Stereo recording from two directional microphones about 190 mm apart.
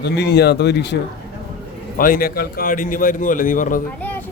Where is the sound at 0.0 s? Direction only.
60° left (ahead or behind).